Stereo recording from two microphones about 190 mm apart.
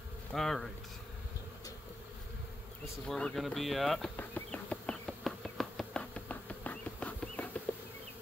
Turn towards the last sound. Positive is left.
turn(degrees=5)  # may be behind; listen again after turning